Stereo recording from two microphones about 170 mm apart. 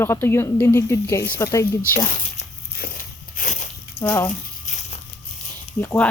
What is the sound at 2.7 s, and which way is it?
Biting, 60° left (ahead or behind).